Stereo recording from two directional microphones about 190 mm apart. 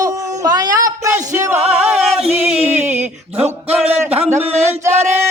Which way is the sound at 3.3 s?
30° right (ahead or behind).